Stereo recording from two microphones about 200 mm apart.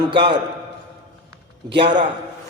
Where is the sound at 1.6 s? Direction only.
25° right (ahead or behind).